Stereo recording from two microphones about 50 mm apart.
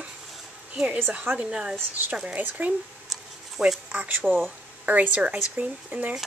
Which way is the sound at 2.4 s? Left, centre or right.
Right.